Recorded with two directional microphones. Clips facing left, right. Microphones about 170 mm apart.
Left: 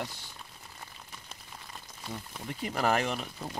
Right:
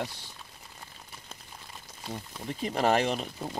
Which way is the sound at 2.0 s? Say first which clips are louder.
Right 3 dB; 25° right (ahead or behind).